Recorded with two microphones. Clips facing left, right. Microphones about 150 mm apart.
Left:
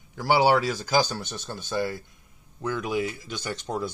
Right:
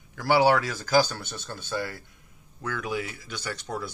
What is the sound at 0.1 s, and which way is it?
Speech, 15° left (ahead or behind).